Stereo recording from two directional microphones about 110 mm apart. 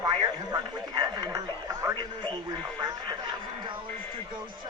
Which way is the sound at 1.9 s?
45° right (ahead or behind).